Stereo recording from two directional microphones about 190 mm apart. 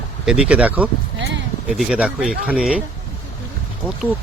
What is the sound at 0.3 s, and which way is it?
Speech, 5° right (ahead or behind).